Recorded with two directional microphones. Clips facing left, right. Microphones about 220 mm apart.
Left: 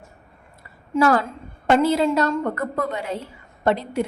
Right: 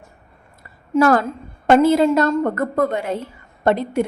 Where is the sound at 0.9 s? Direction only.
45° right (ahead or behind).